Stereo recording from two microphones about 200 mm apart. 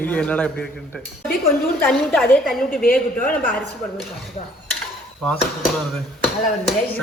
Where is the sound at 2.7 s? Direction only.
45° left (ahead or behind).